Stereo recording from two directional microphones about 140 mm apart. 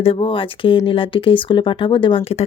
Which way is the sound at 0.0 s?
40° left (ahead or behind).